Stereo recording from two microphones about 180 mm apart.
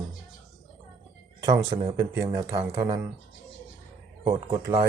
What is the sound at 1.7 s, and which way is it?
Speech, 30° right (ahead or behind).